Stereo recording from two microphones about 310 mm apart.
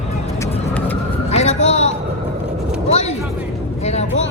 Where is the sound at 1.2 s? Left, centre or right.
Left.